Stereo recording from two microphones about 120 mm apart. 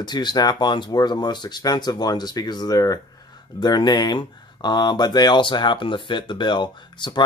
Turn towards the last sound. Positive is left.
turn(degrees=40)  # may be behind; listen again after turning